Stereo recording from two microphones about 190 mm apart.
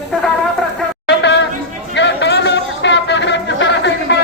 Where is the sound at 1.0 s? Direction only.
65° left (ahead or behind).